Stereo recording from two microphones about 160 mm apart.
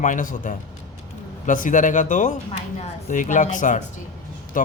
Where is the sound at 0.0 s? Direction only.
55° left (ahead or behind).